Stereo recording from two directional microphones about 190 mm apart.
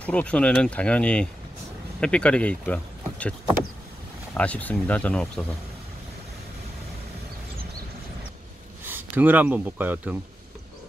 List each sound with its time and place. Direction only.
0.0 s speech: 5° left (ahead or behind)
8.8 s speech: 10° right (ahead or behind)